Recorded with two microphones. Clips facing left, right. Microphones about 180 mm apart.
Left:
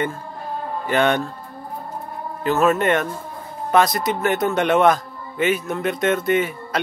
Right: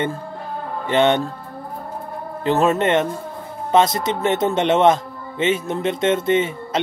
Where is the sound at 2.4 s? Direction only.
30° right (ahead or behind).